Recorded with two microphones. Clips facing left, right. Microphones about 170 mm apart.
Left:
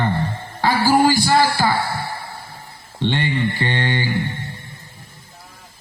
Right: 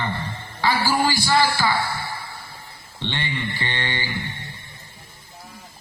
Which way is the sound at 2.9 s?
45° left (ahead or behind).